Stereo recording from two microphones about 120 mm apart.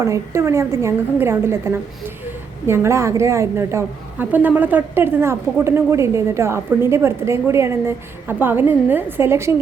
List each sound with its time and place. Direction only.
0.0 s a woman's voice: 25° right (ahead or behind)